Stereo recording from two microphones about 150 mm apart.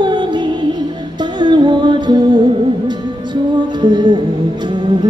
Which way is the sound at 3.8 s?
30° right (ahead or behind).